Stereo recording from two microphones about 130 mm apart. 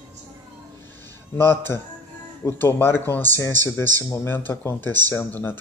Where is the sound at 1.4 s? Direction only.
20° left (ahead or behind).